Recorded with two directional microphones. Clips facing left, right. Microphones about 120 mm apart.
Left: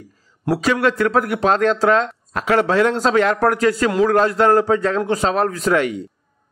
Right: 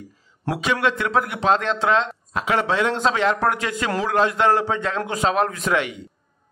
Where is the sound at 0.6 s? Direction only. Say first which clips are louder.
Left 4 dB; 40° left (ahead or behind).